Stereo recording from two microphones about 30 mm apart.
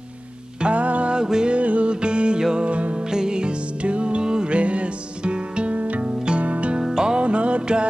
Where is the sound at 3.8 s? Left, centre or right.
Right.